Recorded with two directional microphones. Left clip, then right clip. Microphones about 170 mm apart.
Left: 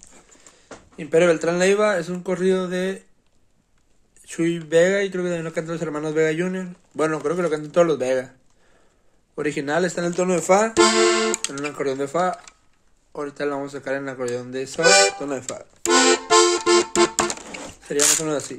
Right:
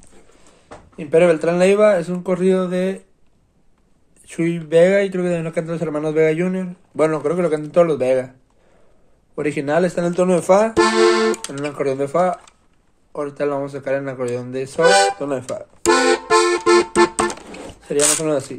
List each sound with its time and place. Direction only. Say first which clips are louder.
0.9 s a man's voice: right 3 dB; 10° left (ahead or behind)
4.3 s a man's voice: right 2 dB; 5° left (ahead or behind)
9.3 s a man's voice: right 4 dB; 10° left (ahead or behind)
10.7 s music: right 2 dB; 20° left (ahead or behind)
11.8 s a man's voice: right 5 dB; 10° left (ahead or behind)
14.8 s speech: right 2 dB; 30° left (ahead or behind)
15.1 s a man's voice: right 4 dB; 10° left (ahead or behind)
15.8 s music: right 2 dB; 20° left (ahead or behind)
18.1 s a man's voice: right 4 dB; 10° left (ahead or behind)